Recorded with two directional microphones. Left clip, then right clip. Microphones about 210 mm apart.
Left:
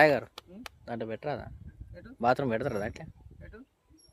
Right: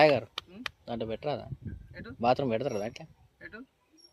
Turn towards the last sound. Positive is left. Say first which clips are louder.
# right 5 dB
turn(degrees=10)  # may be behind; listen again after turning